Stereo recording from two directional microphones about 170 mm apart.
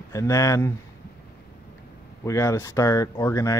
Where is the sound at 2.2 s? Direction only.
20° left (ahead or behind).